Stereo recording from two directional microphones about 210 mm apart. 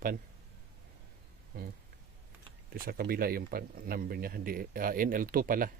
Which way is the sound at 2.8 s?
45° right (ahead or behind).